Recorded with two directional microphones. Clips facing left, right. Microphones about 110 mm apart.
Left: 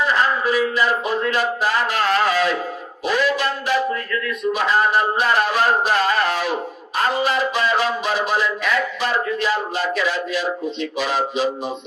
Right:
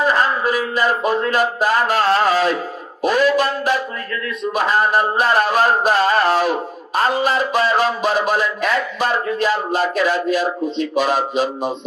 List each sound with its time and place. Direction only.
0.0 s speech: 45° right (ahead or behind)
4.5 s a sound: 45° right (ahead or behind)
7.0 s speech: 40° right (ahead or behind)